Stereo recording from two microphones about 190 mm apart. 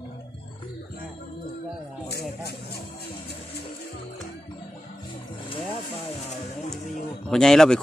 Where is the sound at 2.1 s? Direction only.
55° left (ahead or behind).